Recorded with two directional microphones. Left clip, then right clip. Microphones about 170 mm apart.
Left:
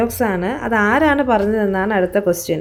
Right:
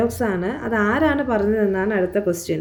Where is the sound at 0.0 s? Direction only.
45° left (ahead or behind).